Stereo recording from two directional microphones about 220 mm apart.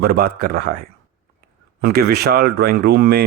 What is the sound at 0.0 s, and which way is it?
Speech, 45° right (ahead or behind).